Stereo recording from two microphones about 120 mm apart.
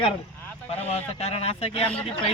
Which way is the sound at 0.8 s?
60° left (ahead or behind).